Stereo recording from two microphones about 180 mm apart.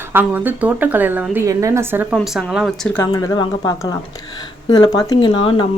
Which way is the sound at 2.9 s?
15° left (ahead or behind).